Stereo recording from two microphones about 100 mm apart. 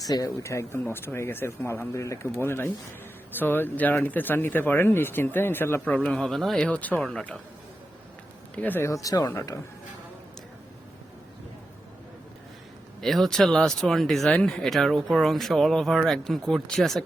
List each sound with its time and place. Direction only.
0.0 s speech: 35° left (ahead or behind); by 7.3 s 5° left (ahead or behind)
8.5 s speech: 15° left (ahead or behind)
8.8 s speech: 35° left (ahead or behind)
13.0 s speech: centre (ahead or behind)